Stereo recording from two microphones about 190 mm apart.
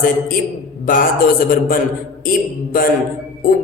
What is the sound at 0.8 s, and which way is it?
Speech, 45° left (ahead or behind).